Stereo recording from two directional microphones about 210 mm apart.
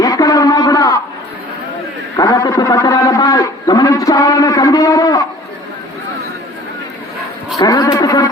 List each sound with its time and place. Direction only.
0.0 s a sound: 15° left (ahead or behind)
2.1 s a man's voice: 15° left (ahead or behind)
7.5 s sheep: 15° left (ahead or behind)